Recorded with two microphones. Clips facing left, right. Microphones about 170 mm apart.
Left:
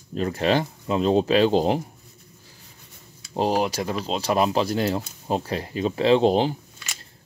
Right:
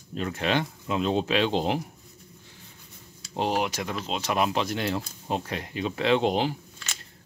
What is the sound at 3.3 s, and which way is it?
A man's voice, 35° left (ahead or behind).